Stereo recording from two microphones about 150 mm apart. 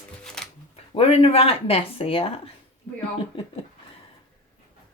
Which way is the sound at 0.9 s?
40° left (ahead or behind).